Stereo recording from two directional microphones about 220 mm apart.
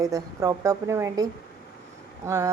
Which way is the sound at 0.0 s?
15° right (ahead or behind).